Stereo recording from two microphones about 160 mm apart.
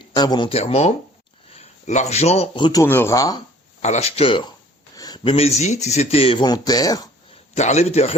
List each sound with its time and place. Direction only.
0.1 s a man's voice: 25° left (ahead or behind)
2.8 s speech: 15° left (ahead or behind)
3.8 s speech: 45° left (ahead or behind); by 7.1 s 25° left (ahead or behind)
7.5 s a man's voice: 45° left (ahead or behind)